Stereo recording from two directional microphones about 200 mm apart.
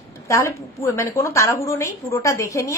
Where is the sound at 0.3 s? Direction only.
15° left (ahead or behind).